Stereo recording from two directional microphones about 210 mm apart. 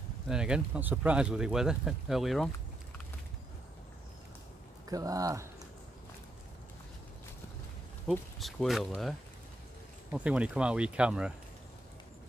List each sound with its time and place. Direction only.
0.3 s speech: 5° right (ahead or behind)
4.8 s speech: 15° right (ahead or behind)
8.1 s speech: centre (ahead or behind)
10.1 s speech: 5° right (ahead or behind)